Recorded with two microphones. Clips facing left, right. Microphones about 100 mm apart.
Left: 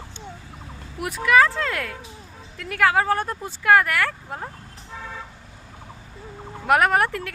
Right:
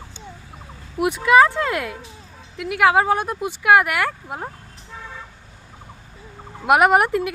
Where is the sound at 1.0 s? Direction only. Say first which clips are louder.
Right 4 dB; 20° right (ahead or behind).